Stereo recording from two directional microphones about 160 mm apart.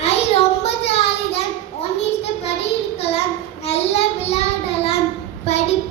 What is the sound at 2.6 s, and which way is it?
Child singing, 40° left (ahead or behind).